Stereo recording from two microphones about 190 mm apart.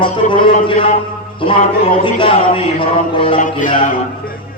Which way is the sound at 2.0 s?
25° left (ahead or behind).